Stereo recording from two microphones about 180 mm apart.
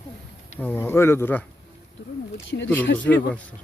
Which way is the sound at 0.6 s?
10° left (ahead or behind).